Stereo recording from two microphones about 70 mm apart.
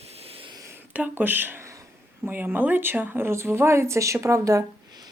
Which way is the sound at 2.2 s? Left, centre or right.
Right.